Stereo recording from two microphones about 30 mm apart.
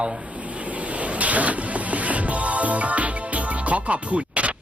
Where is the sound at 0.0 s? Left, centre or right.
Right.